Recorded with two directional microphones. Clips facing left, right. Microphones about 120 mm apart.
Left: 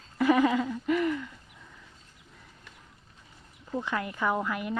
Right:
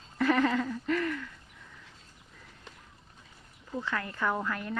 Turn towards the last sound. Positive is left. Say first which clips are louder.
# left 2 dB
turn(degrees=10)  # may be behind; listen again after turning